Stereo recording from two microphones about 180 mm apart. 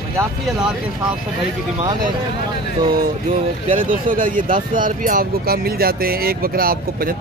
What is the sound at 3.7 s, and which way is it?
Speech, 50° right (ahead or behind).